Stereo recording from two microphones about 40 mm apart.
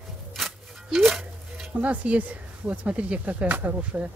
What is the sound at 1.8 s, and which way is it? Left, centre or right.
Speech, right.